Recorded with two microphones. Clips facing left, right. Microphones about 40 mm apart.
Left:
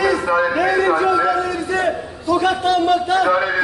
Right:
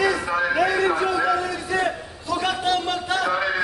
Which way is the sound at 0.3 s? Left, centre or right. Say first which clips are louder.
Left 4 dB; centre.